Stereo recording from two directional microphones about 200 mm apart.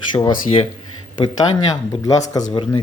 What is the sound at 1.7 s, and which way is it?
A man's voice, 20° left (ahead or behind).